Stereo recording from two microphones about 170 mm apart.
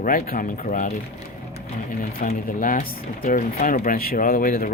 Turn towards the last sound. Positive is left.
turn(degrees=55)  # may be behind; listen again after turning